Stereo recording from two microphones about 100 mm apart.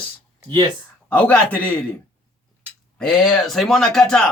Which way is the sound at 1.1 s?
15° left (ahead or behind).